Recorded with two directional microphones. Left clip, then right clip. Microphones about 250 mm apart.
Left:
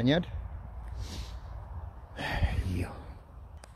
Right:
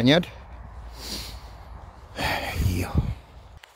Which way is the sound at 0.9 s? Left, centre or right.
Right.